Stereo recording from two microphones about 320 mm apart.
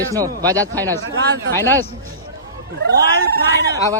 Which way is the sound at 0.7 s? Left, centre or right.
Centre.